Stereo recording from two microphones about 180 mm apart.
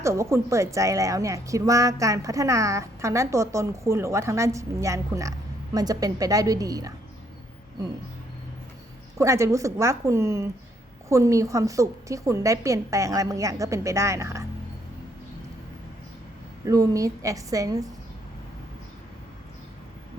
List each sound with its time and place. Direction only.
0.0 s a woman's voice: 15° right (ahead or behind)
9.1 s a woman's voice: 15° right (ahead or behind)
16.6 s a woman's voice: 20° right (ahead or behind)